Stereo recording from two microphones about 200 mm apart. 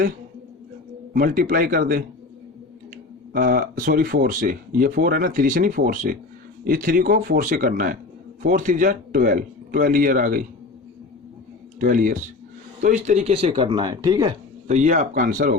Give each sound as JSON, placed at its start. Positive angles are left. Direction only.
{"t": 1.1, "sound": "speech", "side_deg": -45}
{"t": 3.3, "sound": "speech", "side_deg": -45}
{"t": 11.8, "sound": "speech", "side_deg": -45}
{"t": 14.7, "sound": "speech", "side_deg": -35}